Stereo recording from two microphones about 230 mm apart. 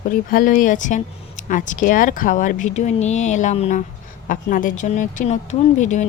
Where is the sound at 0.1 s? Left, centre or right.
Left.